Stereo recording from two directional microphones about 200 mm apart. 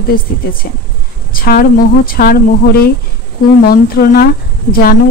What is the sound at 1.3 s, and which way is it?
Speech, 45° left (ahead or behind).